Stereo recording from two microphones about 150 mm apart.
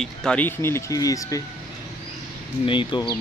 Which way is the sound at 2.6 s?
35° left (ahead or behind).